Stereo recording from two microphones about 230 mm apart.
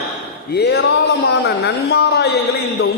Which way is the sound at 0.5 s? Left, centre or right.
Left.